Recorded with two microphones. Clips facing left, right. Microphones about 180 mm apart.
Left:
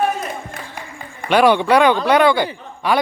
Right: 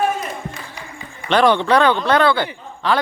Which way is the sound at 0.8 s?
50° left (ahead or behind).